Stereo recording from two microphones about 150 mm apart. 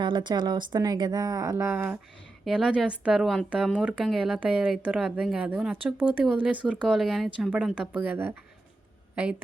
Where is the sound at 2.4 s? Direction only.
5° right (ahead or behind).